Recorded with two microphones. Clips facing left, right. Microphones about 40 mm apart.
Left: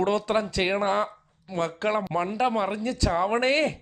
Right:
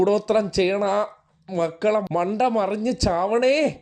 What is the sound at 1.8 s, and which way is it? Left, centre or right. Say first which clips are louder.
A man's voice: right 5 dB; centre.